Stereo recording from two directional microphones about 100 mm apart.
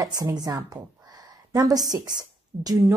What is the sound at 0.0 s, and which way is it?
A woman's voice, 40° right (ahead or behind).